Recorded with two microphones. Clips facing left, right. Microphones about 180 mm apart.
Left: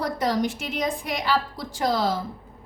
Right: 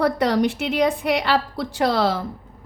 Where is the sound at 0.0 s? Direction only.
65° right (ahead or behind).